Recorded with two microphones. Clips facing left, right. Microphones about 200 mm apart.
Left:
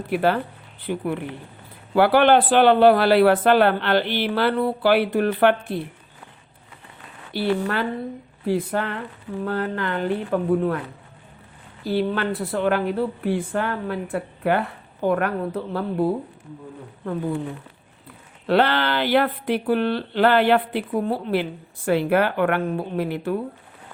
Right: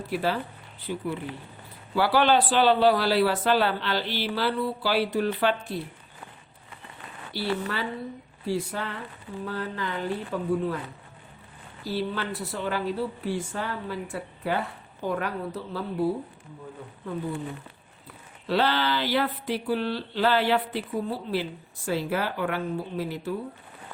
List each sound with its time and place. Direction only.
0.1 s speech: 60° left (ahead or behind)
7.3 s speech: 55° left (ahead or behind)
11.9 s speech: 60° left (ahead or behind)
18.4 s speech: 60° left (ahead or behind)